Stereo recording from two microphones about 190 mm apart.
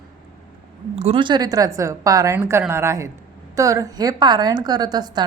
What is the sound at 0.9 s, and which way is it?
A woman's voice, 30° right (ahead or behind).